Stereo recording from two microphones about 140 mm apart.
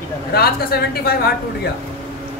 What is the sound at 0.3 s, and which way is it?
Speech, 90° left.